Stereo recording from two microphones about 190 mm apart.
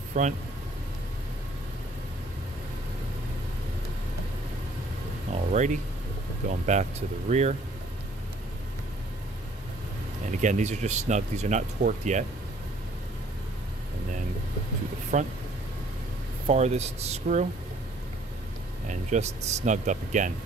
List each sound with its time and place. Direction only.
0.2 s speech: 40° right (ahead or behind)
5.3 s a sound: 40° right (ahead or behind)
6.5 s speech: 40° right (ahead or behind)
10.4 s speech: 40° right (ahead or behind)
15.1 s speech: 40° right (ahead or behind)
16.4 s speech: 35° right (ahead or behind)
18.9 s speech: 35° right (ahead or behind)